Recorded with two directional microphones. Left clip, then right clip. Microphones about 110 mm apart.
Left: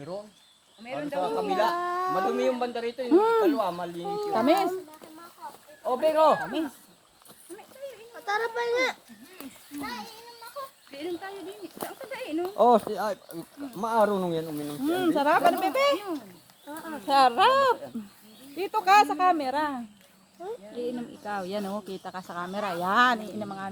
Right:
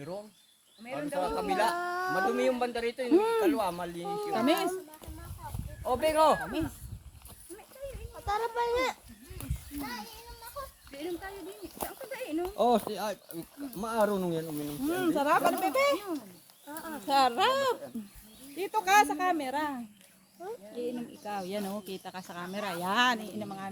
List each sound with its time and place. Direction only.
0.9 s speech: centre (ahead or behind)
1.4 s speech: 10° right (ahead or behind)
1.8 s speech: 5° left (ahead or behind)
2.1 s speech: 10° right (ahead or behind)
4.1 s speech: centre (ahead or behind)
4.4 s speech: 15° right (ahead or behind)
5.8 s speech: 15° right (ahead or behind)
6.4 s speech: centre (ahead or behind)
8.1 s a child's voice: 40° left (ahead or behind)
9.7 s a child's voice: 10° left (ahead or behind)
12.5 s speech: 20° right (ahead or behind); by 17.0 s 5° left (ahead or behind)
17.1 s speech: 15° right (ahead or behind)
20.4 s speech: 5° left (ahead or behind)